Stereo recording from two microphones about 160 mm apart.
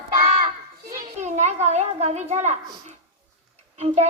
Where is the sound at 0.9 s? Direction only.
50° right (ahead or behind).